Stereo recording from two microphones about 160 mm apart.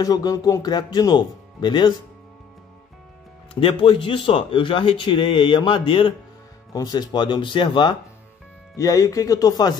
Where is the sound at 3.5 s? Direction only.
35° left (ahead or behind).